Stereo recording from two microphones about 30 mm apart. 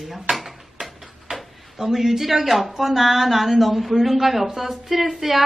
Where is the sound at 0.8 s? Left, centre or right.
Centre.